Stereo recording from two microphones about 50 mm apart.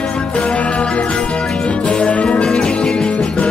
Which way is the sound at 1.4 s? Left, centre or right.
Centre.